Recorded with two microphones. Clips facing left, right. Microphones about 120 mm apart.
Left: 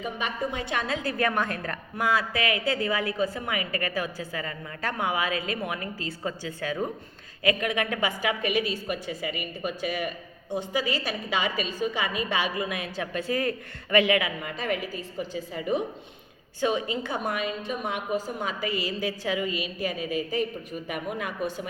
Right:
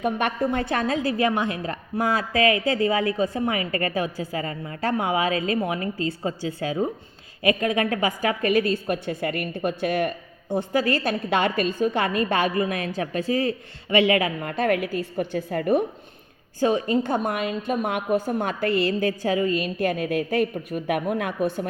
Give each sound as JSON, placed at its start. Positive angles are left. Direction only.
{"t": 0.0, "sound": "speech", "side_deg": -60}
{"t": 0.7, "sound": "a woman's voice", "side_deg": -40}
{"t": 1.2, "sound": "a woman's voice", "side_deg": -25}
{"t": 13.3, "sound": "a woman's voice", "side_deg": -30}
{"t": 14.1, "sound": "speech", "side_deg": -45}
{"t": 16.6, "sound": "a woman's voice", "side_deg": -40}
{"t": 19.6, "sound": "speech", "side_deg": -55}